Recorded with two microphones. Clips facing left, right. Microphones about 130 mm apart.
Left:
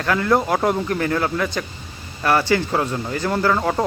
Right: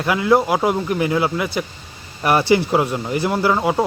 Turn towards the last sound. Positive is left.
turn(degrees=-10)  # may be behind; listen again after turning